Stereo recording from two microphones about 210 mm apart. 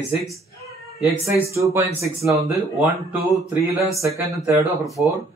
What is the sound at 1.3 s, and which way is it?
Speech, 15° right (ahead or behind).